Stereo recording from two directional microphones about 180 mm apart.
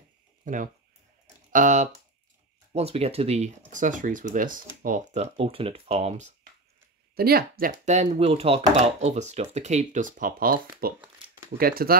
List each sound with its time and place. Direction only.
0.5 s speech: 45° right (ahead or behind)
7.2 s speech: 60° right (ahead or behind)